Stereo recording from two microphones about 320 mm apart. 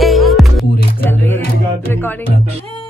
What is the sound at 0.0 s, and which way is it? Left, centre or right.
Music, centre.